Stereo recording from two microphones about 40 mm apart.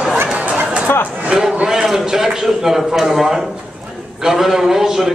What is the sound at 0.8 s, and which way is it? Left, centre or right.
Speech, left.